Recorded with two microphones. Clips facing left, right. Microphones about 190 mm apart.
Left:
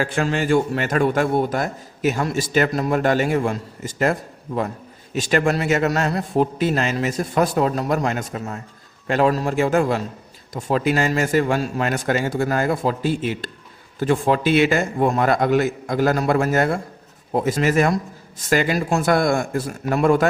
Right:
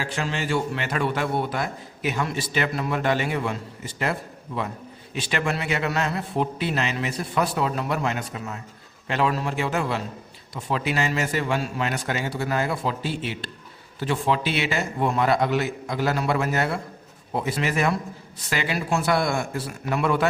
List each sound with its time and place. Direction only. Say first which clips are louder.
0.0 s a man's voice: left 7 dB; 50° left (ahead or behind)